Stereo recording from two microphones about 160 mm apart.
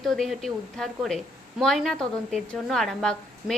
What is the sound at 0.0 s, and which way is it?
A woman's voice, centre (ahead or behind).